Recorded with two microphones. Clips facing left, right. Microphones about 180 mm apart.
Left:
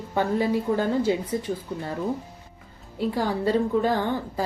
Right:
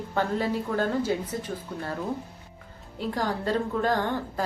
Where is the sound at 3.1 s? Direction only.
10° left (ahead or behind).